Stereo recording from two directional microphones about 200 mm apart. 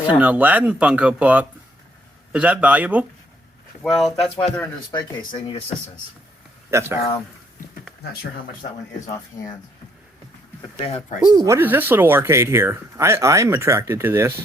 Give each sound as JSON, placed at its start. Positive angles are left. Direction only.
{"t": 0.2, "sound": "speech", "side_deg": -5}
{"t": 4.5, "sound": "speech", "side_deg": 10}
{"t": 4.9, "sound": "speech", "side_deg": 25}
{"t": 6.7, "sound": "speech", "side_deg": -15}
{"t": 10.8, "sound": "speech", "side_deg": 35}
{"t": 11.3, "sound": "speech", "side_deg": -15}